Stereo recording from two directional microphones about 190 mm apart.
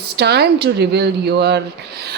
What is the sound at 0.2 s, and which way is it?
Speech, 60° right (ahead or behind).